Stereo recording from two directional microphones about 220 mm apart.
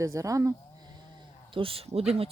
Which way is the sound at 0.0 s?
15° right (ahead or behind).